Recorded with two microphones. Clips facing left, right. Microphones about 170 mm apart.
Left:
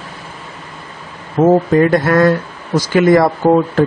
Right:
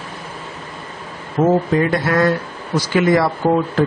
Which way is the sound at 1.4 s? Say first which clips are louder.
Left 5 dB; 40° left (ahead or behind).